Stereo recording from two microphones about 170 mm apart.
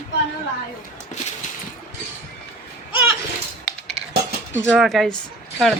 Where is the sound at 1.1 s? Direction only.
45° left (ahead or behind).